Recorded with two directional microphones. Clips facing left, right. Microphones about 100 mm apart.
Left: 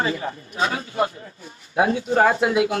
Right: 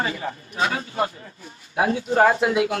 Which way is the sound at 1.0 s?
30° left (ahead or behind).